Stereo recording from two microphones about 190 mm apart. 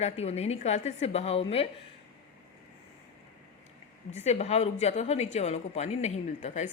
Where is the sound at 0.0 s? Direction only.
35° left (ahead or behind).